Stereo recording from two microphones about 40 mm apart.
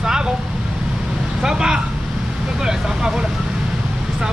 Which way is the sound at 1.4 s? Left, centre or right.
Centre.